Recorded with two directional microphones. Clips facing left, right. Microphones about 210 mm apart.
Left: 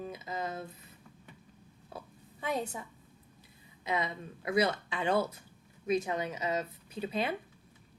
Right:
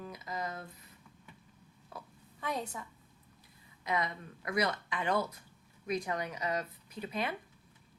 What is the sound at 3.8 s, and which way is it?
Speech, 25° left (ahead or behind).